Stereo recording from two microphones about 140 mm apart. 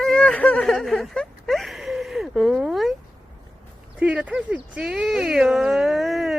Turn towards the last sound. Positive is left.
turn(degrees=0)  # may be behind; listen again after turning